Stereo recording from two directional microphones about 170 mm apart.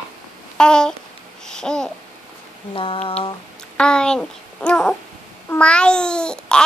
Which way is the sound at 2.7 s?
30° left (ahead or behind).